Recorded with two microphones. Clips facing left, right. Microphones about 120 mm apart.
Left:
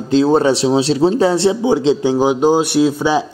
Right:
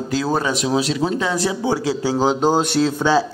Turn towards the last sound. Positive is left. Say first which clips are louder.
# left 3 dB
turn(degrees=15)  # may be behind; listen again after turning